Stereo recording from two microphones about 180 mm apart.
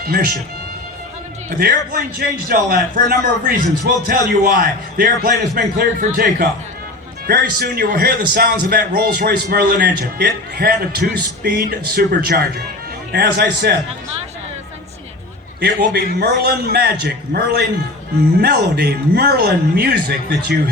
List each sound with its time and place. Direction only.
0.0 s speech: 55° right (ahead or behind)
1.5 s a man's voice: 55° right (ahead or behind)
15.6 s speech: 65° right (ahead or behind)